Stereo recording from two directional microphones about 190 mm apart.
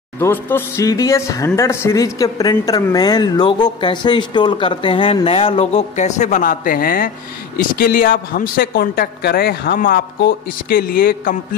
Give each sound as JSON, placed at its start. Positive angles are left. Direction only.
{"t": 0.2, "sound": "a woman's voice", "side_deg": 10}